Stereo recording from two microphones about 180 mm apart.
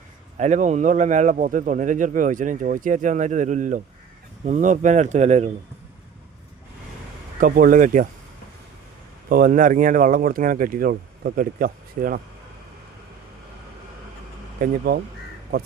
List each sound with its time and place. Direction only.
0.3 s a man's voice: 40° right (ahead or behind)
7.3 s a man's voice: 50° right (ahead or behind)
9.3 s a man's voice: 50° right (ahead or behind)
14.6 s speech: 60° right (ahead or behind)